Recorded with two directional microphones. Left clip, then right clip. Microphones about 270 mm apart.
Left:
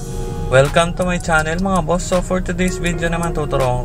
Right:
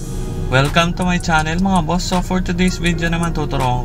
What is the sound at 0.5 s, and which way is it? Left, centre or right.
Speech, centre.